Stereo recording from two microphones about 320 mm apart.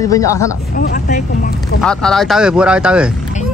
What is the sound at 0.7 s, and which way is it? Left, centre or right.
Speech, left.